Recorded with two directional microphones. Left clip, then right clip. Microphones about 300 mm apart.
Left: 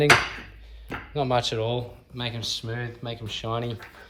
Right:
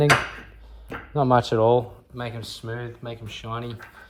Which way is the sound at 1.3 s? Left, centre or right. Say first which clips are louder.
Right 8 dB; centre.